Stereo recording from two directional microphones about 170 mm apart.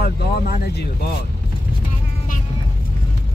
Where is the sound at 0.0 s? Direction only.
65° left (ahead or behind).